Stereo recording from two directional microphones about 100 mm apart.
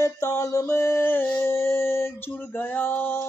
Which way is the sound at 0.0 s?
30° left (ahead or behind).